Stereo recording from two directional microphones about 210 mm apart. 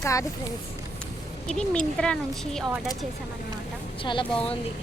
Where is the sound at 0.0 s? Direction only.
15° left (ahead or behind).